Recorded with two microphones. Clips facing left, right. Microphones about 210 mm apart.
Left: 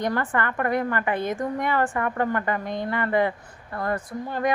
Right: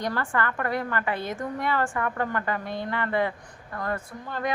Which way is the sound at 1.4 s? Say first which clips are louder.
Left 3 dB; 15° left (ahead or behind).